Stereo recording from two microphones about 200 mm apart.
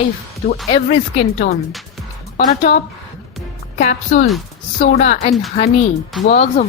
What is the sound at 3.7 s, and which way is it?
Speech, 40° left (ahead or behind).